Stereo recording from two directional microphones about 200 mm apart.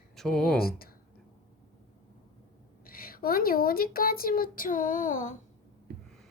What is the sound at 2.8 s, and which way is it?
Speech, 45° left (ahead or behind).